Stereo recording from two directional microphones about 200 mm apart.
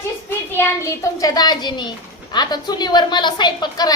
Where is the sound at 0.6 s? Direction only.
15° left (ahead or behind).